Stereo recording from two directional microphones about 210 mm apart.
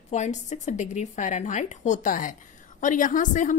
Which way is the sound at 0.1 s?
35° left (ahead or behind).